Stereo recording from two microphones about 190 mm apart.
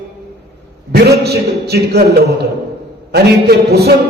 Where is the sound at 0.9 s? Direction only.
55° right (ahead or behind).